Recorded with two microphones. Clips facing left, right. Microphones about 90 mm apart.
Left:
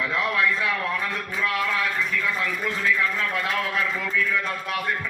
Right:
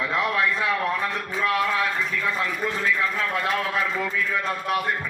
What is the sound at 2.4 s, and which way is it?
A man's voice, 30° right (ahead or behind).